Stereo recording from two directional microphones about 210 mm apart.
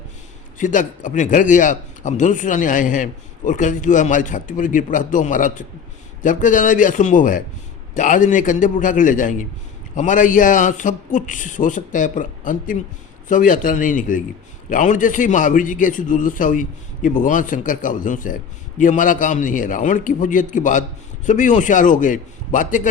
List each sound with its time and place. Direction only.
0.6 s speech: 40° left (ahead or behind)